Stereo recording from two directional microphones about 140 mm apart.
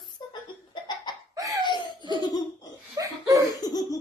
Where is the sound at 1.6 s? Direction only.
30° left (ahead or behind).